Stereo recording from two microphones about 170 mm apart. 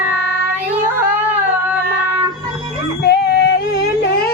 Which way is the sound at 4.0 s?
70° left (ahead or behind).